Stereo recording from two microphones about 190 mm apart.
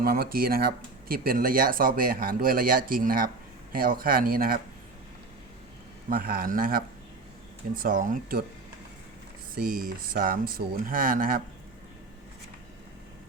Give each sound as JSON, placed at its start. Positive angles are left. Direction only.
{"t": 0.0, "sound": "speech", "side_deg": -50}
{"t": 6.1, "sound": "speech", "side_deg": -50}
{"t": 9.6, "sound": "speech", "side_deg": -50}